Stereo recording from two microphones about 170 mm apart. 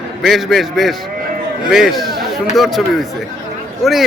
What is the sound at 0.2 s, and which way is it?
Speech, centre (ahead or behind).